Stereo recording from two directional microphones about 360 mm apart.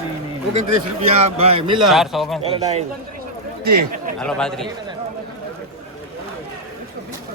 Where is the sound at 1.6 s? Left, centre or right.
Right.